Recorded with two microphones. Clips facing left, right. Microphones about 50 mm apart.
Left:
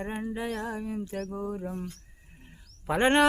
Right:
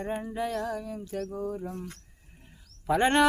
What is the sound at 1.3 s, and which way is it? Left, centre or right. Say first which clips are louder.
Speech: even; centre.